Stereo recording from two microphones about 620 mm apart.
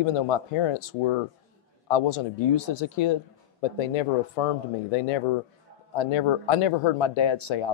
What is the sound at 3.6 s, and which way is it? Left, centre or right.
Speech, left.